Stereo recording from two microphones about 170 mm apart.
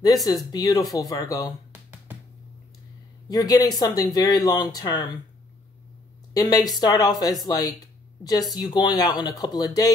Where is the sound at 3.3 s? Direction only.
20° left (ahead or behind).